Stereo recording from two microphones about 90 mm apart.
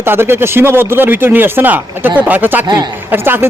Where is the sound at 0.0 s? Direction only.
25° right (ahead or behind).